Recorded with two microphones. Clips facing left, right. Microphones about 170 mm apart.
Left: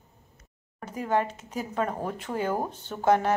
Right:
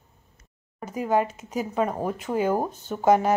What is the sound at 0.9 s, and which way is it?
Speech, 10° right (ahead or behind).